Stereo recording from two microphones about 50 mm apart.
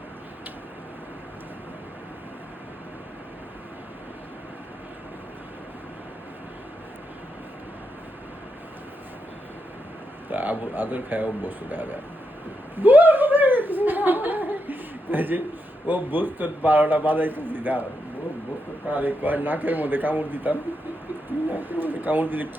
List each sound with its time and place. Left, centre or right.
10.2 s a man's voice: right
12.7 s chuckle: right
15.9 s a man's voice: right
18.9 s a man's voice: right